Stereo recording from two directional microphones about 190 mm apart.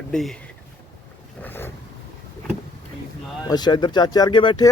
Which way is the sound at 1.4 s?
10° left (ahead or behind).